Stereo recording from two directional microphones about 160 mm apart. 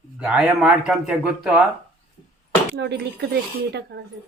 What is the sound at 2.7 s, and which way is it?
Speech, 90° right.